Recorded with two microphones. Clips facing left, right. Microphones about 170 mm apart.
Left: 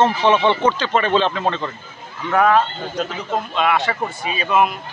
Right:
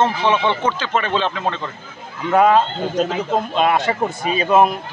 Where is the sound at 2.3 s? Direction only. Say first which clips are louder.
Right 2 dB; 20° right (ahead or behind).